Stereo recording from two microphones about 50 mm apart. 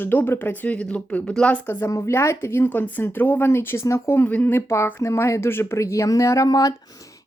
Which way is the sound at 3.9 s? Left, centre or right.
Left.